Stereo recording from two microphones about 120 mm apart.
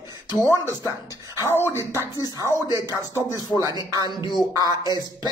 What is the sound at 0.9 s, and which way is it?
Speech, 25° right (ahead or behind).